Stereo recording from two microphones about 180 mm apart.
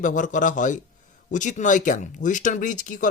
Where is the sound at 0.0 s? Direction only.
45° left (ahead or behind).